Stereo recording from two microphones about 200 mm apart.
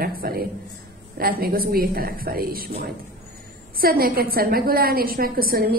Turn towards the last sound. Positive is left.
turn(degrees=-50)  # may be behind; listen again after turning